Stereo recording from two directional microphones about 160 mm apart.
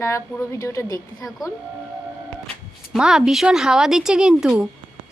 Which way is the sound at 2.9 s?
5° right (ahead or behind).